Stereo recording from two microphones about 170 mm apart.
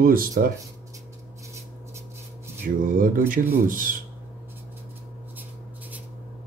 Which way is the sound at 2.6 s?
55° right (ahead or behind).